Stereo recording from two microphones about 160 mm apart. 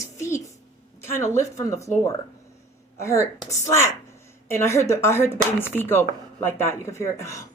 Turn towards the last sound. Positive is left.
turn(degrees=20)  # may be behind; listen again after turning